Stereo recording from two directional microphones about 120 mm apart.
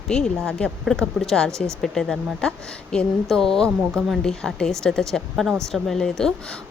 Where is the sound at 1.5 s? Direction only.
25° right (ahead or behind).